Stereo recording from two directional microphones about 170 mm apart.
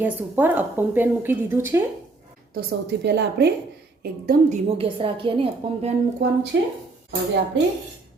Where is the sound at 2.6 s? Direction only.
80° right.